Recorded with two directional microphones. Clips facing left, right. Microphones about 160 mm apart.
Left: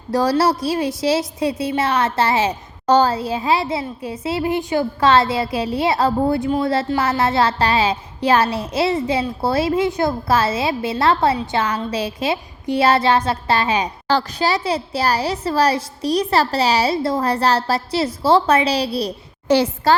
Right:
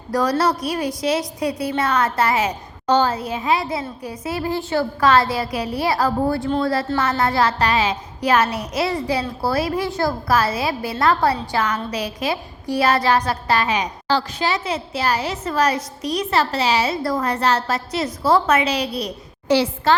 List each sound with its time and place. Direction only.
0.1 s a woman's voice: 30° left (ahead or behind)
2.8 s a woman's voice: 40° left (ahead or behind)
14.1 s a woman's voice: 45° left (ahead or behind)